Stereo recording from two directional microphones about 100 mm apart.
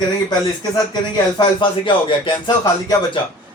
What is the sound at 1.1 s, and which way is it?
Speech, 55° left (ahead or behind).